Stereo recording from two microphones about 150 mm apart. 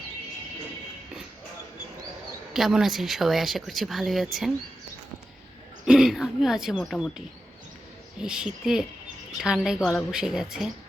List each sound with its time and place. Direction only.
2.5 s speech: 5° right (ahead or behind)
5.8 s speech: 5° right (ahead or behind)
8.2 s speech: 5° right (ahead or behind)